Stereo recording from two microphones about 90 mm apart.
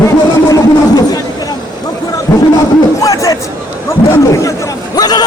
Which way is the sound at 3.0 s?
40° left (ahead or behind).